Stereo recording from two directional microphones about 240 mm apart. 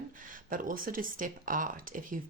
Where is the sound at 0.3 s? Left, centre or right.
Right.